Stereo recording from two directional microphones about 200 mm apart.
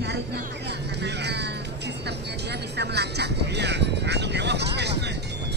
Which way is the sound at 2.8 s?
55° right (ahead or behind).